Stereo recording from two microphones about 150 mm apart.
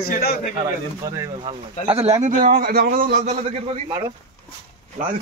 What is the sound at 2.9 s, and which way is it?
Speech, 65° right (ahead or behind).